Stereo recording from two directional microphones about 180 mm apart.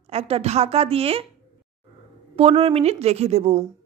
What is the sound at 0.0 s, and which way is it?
Speech, 35° right (ahead or behind).